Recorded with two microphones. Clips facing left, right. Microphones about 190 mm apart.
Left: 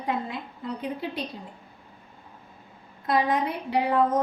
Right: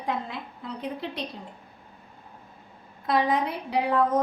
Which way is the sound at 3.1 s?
Centre (ahead or behind).